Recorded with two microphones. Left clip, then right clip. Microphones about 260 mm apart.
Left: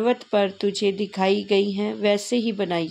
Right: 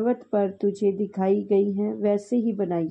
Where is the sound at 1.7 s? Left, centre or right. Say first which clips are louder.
Left 2 dB; centre.